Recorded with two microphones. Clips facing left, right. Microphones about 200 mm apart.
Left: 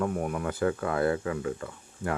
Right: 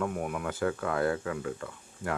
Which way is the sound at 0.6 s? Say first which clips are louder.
Left 2 dB; 10° left (ahead or behind).